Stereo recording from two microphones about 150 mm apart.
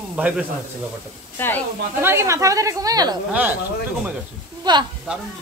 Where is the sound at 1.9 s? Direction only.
15° right (ahead or behind).